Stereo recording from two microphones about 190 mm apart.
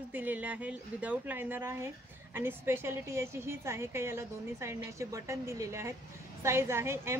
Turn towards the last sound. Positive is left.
turn(degrees=-15)  # may be behind; listen again after turning